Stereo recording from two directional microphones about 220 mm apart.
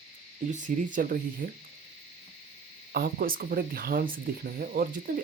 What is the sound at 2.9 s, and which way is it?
Speech, 45° right (ahead or behind).